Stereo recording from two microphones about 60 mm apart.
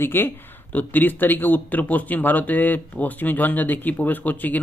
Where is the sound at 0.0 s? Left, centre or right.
Left.